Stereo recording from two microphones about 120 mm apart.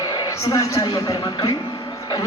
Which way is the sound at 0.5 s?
30° left (ahead or behind).